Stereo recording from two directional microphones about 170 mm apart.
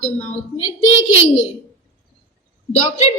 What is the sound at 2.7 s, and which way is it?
Speech, 40° left (ahead or behind).